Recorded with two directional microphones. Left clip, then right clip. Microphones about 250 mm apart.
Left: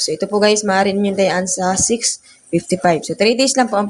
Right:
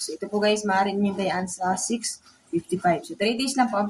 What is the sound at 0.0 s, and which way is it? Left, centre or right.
Speech, left.